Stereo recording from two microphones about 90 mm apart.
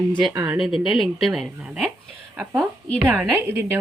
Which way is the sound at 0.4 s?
5° right (ahead or behind).